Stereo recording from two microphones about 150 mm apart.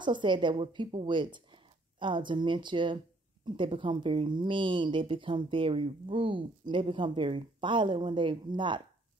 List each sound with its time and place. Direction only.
0.0 s a woman's voice: 30° right (ahead or behind)